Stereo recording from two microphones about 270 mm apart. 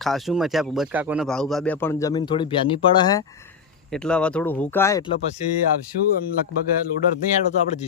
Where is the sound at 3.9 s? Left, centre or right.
Centre.